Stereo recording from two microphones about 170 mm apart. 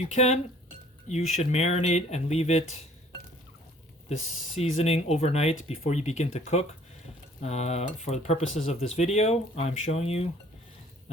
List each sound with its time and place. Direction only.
0.0 s speech: 40° left (ahead or behind)
4.5 s speech: 40° left (ahead or behind)